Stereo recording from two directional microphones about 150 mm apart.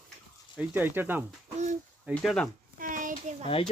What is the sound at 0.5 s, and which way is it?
Speech, 15° right (ahead or behind).